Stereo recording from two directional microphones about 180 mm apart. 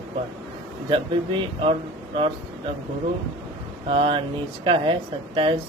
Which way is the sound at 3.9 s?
30° right (ahead or behind).